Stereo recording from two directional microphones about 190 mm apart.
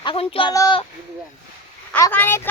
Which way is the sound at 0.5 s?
20° left (ahead or behind).